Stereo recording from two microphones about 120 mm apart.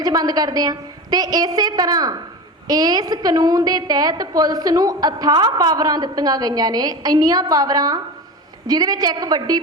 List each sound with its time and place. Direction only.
0.0 s a woman's voice: 35° right (ahead or behind)